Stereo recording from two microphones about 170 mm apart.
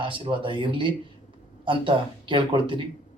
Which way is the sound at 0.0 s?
30° right (ahead or behind).